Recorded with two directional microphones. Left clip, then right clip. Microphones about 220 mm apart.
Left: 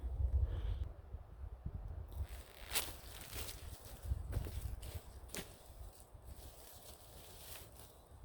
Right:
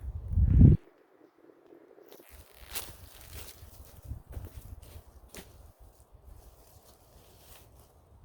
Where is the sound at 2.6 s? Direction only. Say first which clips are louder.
Left 1 dB; 20° right (ahead or behind).